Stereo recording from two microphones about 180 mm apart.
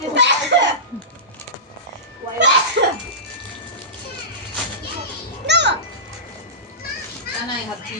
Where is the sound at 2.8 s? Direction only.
65° right (ahead or behind).